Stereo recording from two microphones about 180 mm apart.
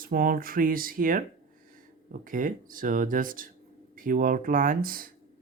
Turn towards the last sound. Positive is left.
turn(degrees=-50)  # may be behind; listen again after turning